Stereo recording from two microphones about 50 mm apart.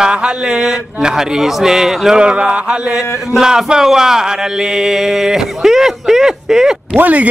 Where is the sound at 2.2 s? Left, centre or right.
Centre.